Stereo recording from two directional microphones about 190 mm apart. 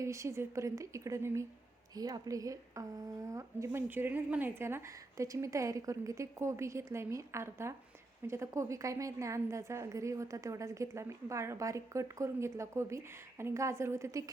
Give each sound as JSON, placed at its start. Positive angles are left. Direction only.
{"t": 0.0, "sound": "a woman's voice", "side_deg": -15}